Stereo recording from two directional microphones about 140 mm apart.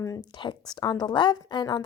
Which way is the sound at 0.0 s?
30° left (ahead or behind).